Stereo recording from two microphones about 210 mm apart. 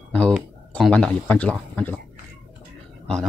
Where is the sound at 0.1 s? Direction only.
5° left (ahead or behind).